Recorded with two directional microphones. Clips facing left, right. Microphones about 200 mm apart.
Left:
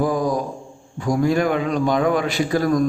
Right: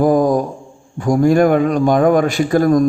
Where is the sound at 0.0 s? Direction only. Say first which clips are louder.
Right 7 dB; 50° right (ahead or behind).